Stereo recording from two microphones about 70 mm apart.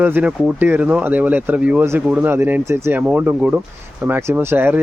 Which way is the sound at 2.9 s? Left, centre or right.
Right.